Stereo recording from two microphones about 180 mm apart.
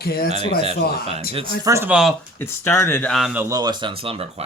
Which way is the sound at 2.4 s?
15° left (ahead or behind).